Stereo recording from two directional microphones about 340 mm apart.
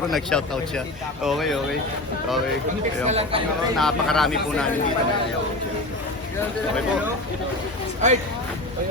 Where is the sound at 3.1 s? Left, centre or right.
Centre.